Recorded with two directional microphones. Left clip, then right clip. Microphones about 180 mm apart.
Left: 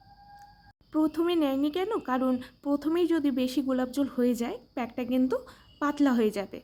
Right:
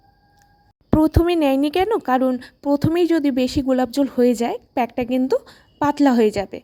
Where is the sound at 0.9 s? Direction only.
40° right (ahead or behind).